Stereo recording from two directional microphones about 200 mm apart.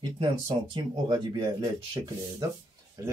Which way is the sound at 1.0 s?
20° right (ahead or behind).